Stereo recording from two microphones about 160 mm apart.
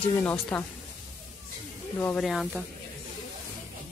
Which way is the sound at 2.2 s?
Centre (ahead or behind).